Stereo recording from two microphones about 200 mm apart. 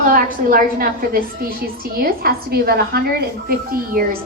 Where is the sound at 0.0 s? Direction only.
45° right (ahead or behind).